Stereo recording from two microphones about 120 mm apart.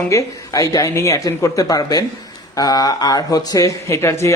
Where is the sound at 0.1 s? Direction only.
25° left (ahead or behind).